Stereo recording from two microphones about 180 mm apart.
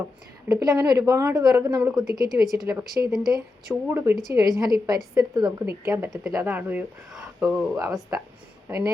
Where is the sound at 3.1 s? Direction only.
Centre (ahead or behind).